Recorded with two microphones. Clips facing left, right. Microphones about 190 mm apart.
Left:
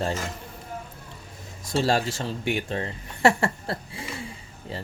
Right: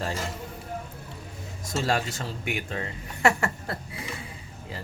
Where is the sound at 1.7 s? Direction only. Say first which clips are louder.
Left 4 dB; 35° left (ahead or behind).